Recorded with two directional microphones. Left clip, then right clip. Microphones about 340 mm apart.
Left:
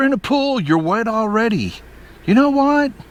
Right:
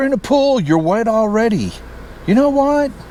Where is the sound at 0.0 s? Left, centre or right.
Left.